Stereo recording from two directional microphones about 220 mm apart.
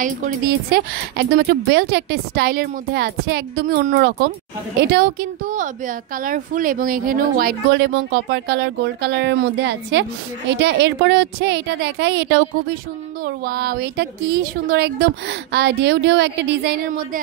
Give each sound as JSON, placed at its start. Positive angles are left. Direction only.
{"t": 0.0, "sound": "speech", "side_deg": -40}